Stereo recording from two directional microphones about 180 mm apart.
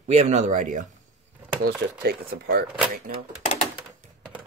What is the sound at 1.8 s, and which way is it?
Speech, 90° right.